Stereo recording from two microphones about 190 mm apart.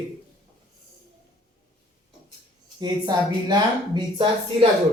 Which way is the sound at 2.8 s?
20° right (ahead or behind).